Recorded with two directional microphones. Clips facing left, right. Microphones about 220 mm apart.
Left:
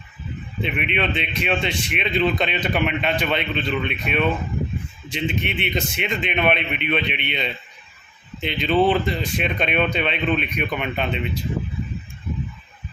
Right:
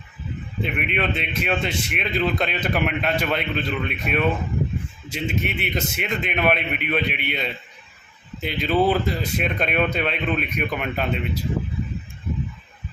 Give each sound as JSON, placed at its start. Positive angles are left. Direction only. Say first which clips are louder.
{"t": 0.6, "sound": "speech", "louder": "left 1 dB", "side_deg": -5}